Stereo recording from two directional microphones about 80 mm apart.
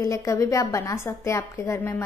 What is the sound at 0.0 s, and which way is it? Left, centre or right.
A woman's voice, left.